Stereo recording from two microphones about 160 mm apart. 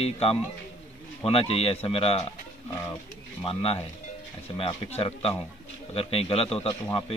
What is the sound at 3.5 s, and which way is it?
A man's voice, 35° left (ahead or behind).